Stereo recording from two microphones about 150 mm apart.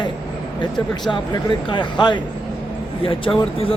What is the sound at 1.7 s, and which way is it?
Speech, 30° left (ahead or behind).